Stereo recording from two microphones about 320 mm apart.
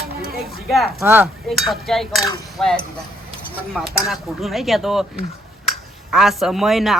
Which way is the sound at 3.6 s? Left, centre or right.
Centre.